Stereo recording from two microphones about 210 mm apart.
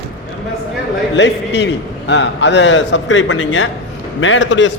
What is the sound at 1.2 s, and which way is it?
A man's voice, 55° left (ahead or behind).